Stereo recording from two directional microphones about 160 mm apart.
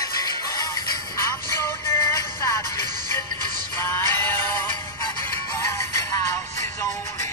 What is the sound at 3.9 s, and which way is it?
Music, 15° left (ahead or behind).